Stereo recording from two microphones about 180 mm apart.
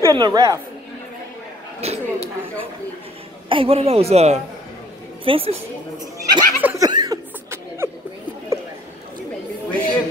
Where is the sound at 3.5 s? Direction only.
30° right (ahead or behind).